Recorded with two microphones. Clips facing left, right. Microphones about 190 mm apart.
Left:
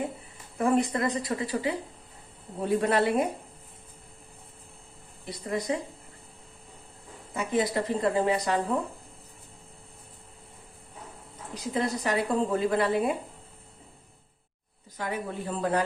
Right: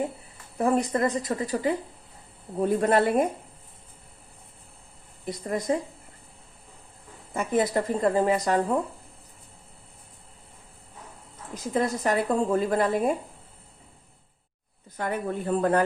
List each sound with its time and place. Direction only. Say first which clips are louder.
0.6 s a woman's voice: right 1 dB; 40° right (ahead or behind)
5.2 s a woman's voice: right 2 dB; 45° right (ahead or behind)
7.3 s a woman's voice: right 3 dB; 50° right (ahead or behind)
11.5 s a woman's voice: right 3 dB; 45° right (ahead or behind)
14.9 s a woman's voice: right 4 dB; 55° right (ahead or behind)